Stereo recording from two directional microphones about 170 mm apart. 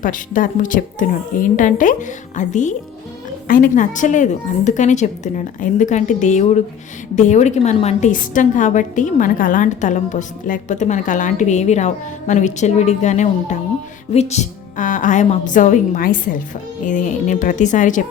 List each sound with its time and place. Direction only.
0.0 s a woman's voice: 50° left (ahead or behind)